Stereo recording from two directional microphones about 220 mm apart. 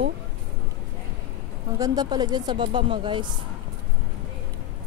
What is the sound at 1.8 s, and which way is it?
Speech, 15° right (ahead or behind).